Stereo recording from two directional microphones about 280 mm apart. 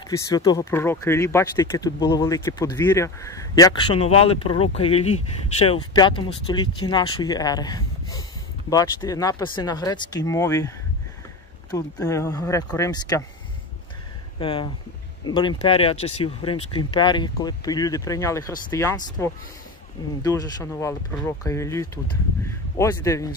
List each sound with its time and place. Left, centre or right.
0.1 s speech: centre
11.7 s speech: centre
14.4 s speech: centre